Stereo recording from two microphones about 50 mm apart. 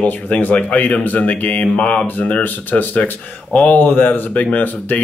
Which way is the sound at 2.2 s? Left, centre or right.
Left.